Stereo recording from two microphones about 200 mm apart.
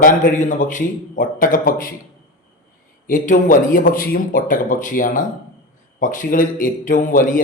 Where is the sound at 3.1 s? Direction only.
40° left (ahead or behind).